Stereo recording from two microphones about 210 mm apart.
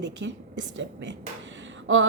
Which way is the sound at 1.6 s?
65° right (ahead or behind).